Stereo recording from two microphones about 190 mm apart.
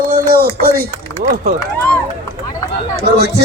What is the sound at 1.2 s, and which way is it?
Speech, 50° right (ahead or behind).